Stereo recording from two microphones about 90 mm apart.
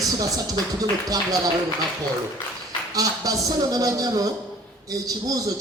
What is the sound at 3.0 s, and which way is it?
A man's voice, 45° right (ahead or behind).